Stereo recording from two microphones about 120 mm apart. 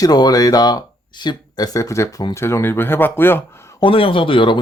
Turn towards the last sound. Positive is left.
turn(degrees=45)  # may be behind; listen again after turning